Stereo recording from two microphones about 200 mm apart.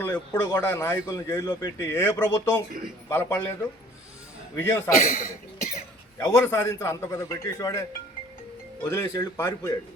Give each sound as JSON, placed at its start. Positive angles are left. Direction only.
{"t": 0.0, "sound": "speech", "side_deg": 10}
{"t": 4.5, "sound": "speech", "side_deg": 10}
{"t": 4.9, "sound": "speech", "side_deg": 45}
{"t": 6.1, "sound": "speech", "side_deg": 15}